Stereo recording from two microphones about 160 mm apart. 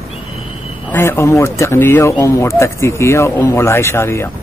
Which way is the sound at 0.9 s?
15° left (ahead or behind).